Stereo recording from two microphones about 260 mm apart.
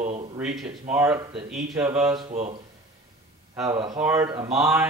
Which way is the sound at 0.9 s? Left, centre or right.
Centre.